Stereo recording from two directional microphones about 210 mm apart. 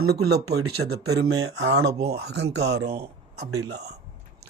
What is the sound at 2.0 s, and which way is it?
Speech, 50° right (ahead or behind).